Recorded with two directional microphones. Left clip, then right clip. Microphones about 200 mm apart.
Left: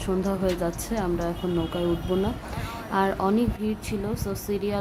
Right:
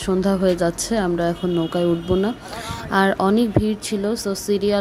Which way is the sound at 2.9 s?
30° right (ahead or behind).